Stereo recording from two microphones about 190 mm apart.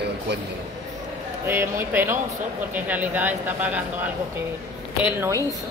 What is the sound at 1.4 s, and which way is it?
Speech, 10° right (ahead or behind).